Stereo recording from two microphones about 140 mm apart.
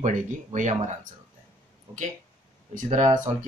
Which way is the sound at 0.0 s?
60° right (ahead or behind).